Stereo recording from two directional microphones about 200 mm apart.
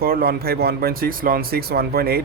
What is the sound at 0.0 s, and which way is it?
Speech, 50° right (ahead or behind).